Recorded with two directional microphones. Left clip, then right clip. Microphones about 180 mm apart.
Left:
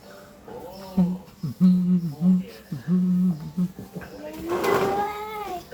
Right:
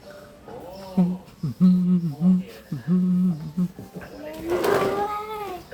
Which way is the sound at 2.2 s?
15° right (ahead or behind).